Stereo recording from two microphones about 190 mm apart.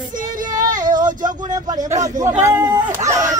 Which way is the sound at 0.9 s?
45° right (ahead or behind).